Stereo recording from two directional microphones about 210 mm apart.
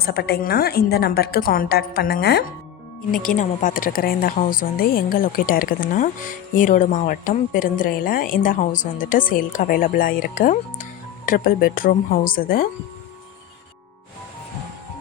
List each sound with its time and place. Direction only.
0.0 s a woman's voice: 50° left (ahead or behind)
3.1 s a woman's voice: 40° left (ahead or behind)